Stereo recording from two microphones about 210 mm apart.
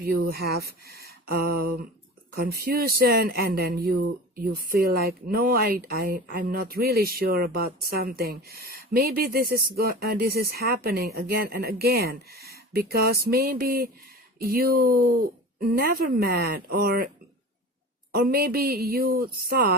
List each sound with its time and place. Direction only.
0.0 s speech: 50° right (ahead or behind)
18.1 s speech: 45° right (ahead or behind)